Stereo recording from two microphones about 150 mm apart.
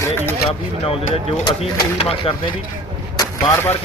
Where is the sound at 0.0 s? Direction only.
15° left (ahead or behind).